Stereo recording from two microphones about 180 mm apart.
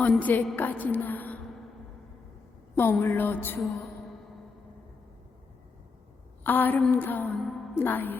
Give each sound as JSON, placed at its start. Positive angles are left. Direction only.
{"t": 0.0, "sound": "a woman's voice", "side_deg": 10}
{"t": 2.7, "sound": "a woman's voice", "side_deg": 10}
{"t": 6.4, "sound": "a woman's voice", "side_deg": 10}